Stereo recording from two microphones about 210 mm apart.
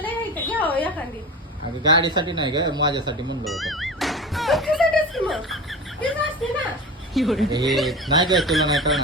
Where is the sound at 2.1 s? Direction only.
20° right (ahead or behind).